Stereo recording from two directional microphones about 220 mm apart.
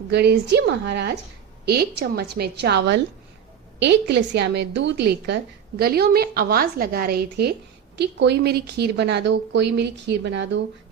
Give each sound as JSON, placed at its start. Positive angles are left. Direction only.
{"t": 0.1, "sound": "a woman's voice", "side_deg": -50}